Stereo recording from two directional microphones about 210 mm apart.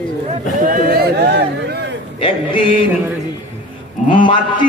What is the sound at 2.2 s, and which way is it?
Speech, 25° left (ahead or behind).